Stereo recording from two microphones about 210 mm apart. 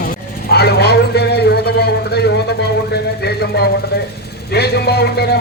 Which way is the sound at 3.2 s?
50° left (ahead or behind).